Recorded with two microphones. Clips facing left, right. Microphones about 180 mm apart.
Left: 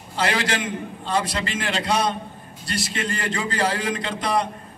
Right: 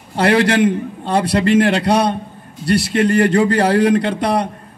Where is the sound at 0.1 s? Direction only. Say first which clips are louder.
Right 10 dB; 60° right (ahead or behind).